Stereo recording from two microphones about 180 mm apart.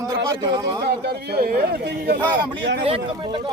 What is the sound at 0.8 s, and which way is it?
Speech, 65° right (ahead or behind).